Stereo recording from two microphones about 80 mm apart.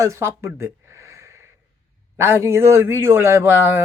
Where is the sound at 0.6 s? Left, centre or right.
Right.